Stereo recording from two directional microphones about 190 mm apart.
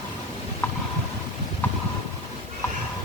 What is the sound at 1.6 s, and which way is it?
Vehicle, 10° left (ahead or behind).